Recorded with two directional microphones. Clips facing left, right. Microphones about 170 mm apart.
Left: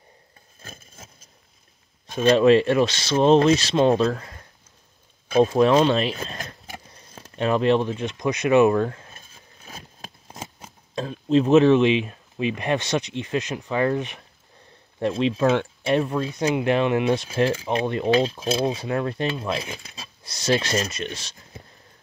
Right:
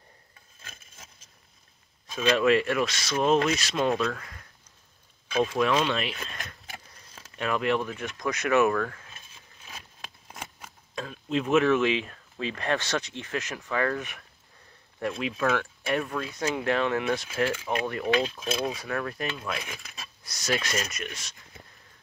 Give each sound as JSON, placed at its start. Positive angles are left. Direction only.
{"t": 0.6, "sound": "a sound", "side_deg": 35}
{"t": 2.3, "sound": "speech", "side_deg": 30}
{"t": 5.3, "sound": "a sound", "side_deg": 35}
{"t": 10.4, "sound": "speech", "side_deg": 25}
{"t": 17.3, "sound": "speech", "side_deg": 35}
{"t": 17.6, "sound": "speech", "side_deg": 25}
{"t": 18.1, "sound": "speech", "side_deg": 35}